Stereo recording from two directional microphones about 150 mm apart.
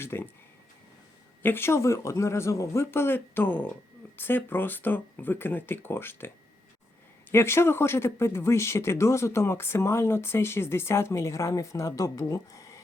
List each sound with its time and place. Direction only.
0.0 s speech: 15° left (ahead or behind)
1.4 s speech: 15° left (ahead or behind)